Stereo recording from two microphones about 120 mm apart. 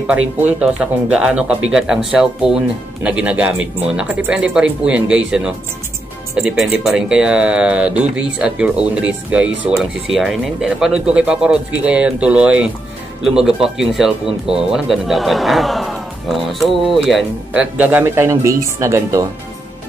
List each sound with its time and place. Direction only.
0.0 s speech: 15° right (ahead or behind)
17.5 s speech: 15° right (ahead or behind)